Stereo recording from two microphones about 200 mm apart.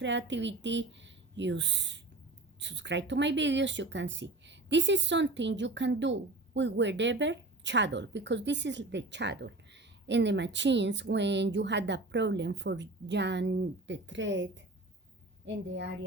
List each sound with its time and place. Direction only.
0.0 s speech: 65° right (ahead or behind)